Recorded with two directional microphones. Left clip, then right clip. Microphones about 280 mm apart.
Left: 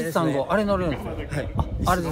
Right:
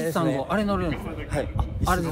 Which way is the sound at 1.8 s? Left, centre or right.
Centre.